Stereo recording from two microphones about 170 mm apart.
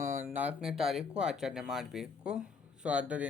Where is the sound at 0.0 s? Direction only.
15° right (ahead or behind).